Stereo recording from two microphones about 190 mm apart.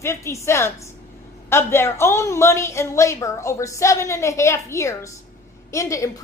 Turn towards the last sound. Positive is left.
turn(degrees=15)  # may be behind; listen again after turning